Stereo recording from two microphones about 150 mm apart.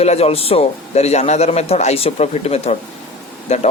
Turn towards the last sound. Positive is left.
turn(degrees=50)  # may be behind; listen again after turning